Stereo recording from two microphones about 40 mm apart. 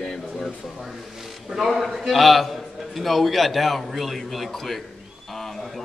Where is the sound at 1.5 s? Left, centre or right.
Centre.